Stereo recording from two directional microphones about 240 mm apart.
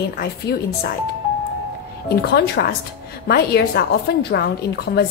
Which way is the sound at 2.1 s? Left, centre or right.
Left.